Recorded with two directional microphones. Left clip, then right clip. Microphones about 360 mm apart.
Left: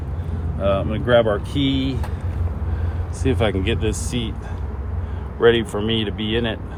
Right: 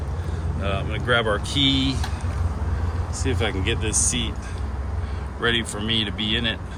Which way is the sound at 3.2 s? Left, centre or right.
Centre.